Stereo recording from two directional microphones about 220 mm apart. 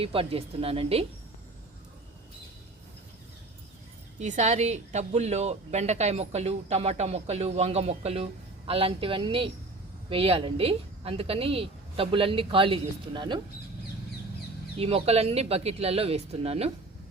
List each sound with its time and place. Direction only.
0.0 s a woman's voice: 25° right (ahead or behind)
4.2 s a woman's voice: 30° right (ahead or behind)
14.8 s a woman's voice: 25° right (ahead or behind)